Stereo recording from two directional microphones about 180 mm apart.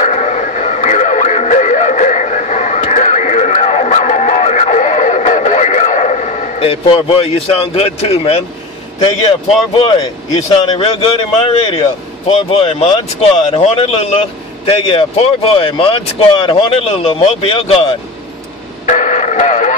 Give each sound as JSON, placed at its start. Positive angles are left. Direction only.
{"t": 0.0, "sound": "radio", "side_deg": 40}
{"t": 9.8, "sound": "speech", "side_deg": 25}
{"t": 18.9, "sound": "music", "side_deg": 45}